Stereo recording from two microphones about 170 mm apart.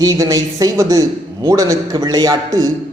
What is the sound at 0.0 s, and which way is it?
A man's voice, 20° right (ahead or behind).